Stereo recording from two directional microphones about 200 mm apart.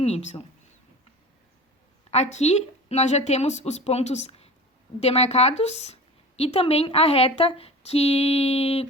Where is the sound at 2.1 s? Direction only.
35° left (ahead or behind).